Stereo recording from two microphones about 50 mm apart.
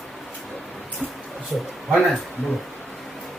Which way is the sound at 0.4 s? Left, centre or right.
Centre.